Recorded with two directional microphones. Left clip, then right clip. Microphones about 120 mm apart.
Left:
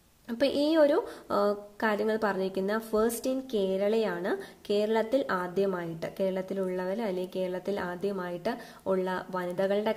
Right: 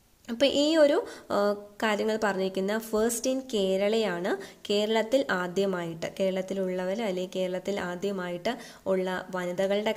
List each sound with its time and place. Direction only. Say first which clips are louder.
0.3 s a woman's voice: right 2 dB; 15° right (ahead or behind)